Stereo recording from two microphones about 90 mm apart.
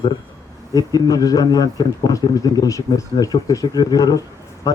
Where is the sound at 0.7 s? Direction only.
45° left (ahead or behind).